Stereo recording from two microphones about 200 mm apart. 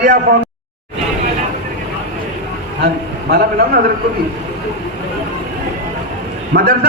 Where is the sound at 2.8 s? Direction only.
55° right (ahead or behind).